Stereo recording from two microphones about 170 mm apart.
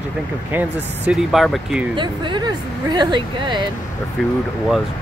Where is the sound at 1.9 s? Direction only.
25° right (ahead or behind).